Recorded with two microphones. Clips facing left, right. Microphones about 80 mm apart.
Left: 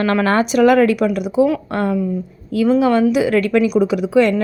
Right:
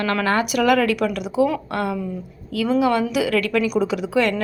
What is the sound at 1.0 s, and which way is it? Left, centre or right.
A woman's voice, left.